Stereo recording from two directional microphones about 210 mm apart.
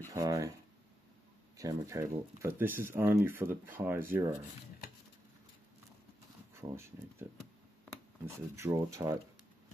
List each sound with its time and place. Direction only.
0.1 s speech: 15° right (ahead or behind)
1.6 s speech: 15° right (ahead or behind)
6.6 s speech: 10° right (ahead or behind)
8.3 s speech: 15° right (ahead or behind)